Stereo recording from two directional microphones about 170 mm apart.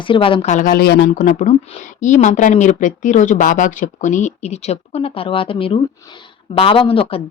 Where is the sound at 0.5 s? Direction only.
55° left (ahead or behind).